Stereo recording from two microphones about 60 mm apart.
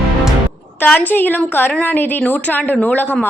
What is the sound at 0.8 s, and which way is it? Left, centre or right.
A woman's voice, left.